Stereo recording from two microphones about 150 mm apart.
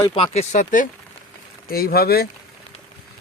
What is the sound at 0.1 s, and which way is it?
Speech, 40° left (ahead or behind).